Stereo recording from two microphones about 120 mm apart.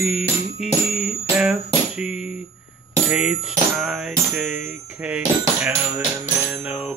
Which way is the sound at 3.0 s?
10° right (ahead or behind).